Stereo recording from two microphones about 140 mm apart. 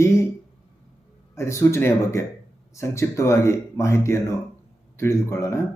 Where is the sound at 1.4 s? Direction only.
20° left (ahead or behind).